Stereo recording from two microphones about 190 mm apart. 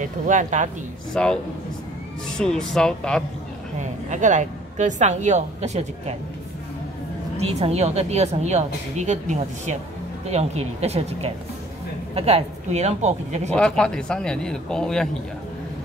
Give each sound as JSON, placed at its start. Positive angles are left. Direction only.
{"t": 0.0, "sound": "a woman's voice", "side_deg": -40}
{"t": 1.1, "sound": "speech", "side_deg": 5}
{"t": 4.1, "sound": "a woman's voice", "side_deg": -40}
{"t": 7.3, "sound": "a woman's voice", "side_deg": -30}
{"t": 13.6, "sound": "speech", "side_deg": 5}